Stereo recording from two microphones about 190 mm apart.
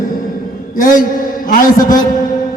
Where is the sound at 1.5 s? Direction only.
45° left (ahead or behind).